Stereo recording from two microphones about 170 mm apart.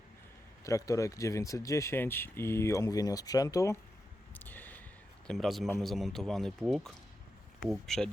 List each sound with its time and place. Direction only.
0.6 s speech: 20° left (ahead or behind)
4.4 s a sound: 10° left (ahead or behind)
5.3 s speech: centre (ahead or behind)